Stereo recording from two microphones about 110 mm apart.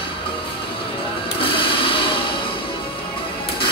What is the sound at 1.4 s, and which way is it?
Music, 50° left (ahead or behind).